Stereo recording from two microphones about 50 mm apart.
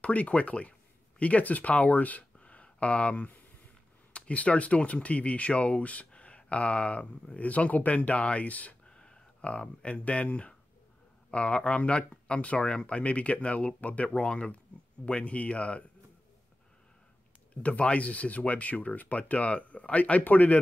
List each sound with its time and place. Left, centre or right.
0.0 s speech: left
8.8 s speech: centre
17.6 s speech: left